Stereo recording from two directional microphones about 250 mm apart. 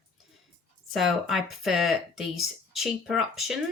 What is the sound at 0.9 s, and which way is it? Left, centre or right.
Speech, centre.